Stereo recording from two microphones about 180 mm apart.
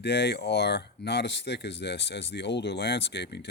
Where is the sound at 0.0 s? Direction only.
70° left (ahead or behind).